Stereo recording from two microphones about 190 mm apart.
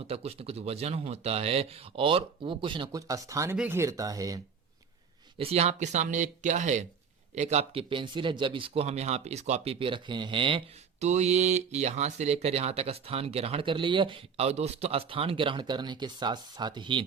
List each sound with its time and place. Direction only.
0.1 s speech: 30° right (ahead or behind)
5.4 s speech: 35° right (ahead or behind)